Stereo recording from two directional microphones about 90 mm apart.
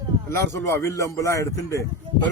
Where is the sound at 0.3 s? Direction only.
30° left (ahead or behind).